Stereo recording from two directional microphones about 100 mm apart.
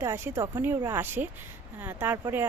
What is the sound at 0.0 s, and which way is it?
Speech, 25° right (ahead or behind).